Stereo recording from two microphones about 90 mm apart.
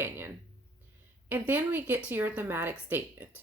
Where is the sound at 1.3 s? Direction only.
20° right (ahead or behind).